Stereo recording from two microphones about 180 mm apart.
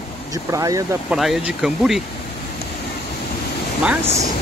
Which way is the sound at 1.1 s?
Centre (ahead or behind).